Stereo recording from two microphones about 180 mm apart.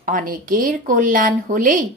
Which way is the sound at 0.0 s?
50° right (ahead or behind).